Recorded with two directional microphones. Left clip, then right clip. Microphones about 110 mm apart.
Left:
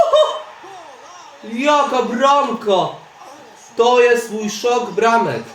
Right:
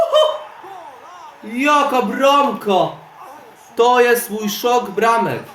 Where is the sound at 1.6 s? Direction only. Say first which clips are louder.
Even; 55° right (ahead or behind).